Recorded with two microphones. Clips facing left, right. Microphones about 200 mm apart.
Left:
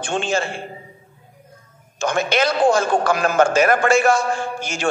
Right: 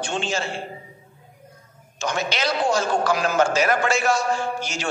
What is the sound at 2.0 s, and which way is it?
A man's voice, 55° left (ahead or behind).